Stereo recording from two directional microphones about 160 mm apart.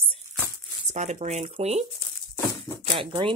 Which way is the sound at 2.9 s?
30° right (ahead or behind).